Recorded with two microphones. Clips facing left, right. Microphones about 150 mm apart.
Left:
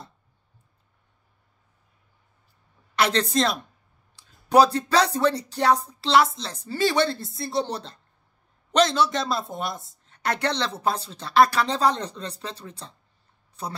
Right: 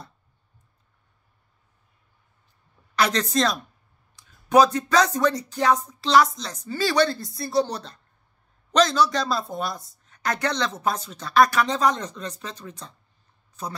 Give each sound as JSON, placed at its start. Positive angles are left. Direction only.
{"t": 3.0, "sound": "speech", "side_deg": 30}